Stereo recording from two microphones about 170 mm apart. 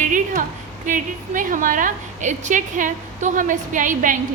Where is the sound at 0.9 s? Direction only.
50° right (ahead or behind).